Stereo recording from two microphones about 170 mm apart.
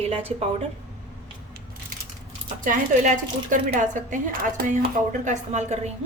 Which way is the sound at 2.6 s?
50° right (ahead or behind).